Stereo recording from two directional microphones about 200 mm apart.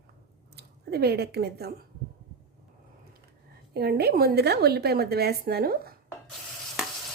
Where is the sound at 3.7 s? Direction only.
50° right (ahead or behind).